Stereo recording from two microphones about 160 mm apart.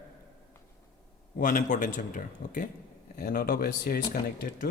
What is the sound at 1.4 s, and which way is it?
Speech, 55° left (ahead or behind).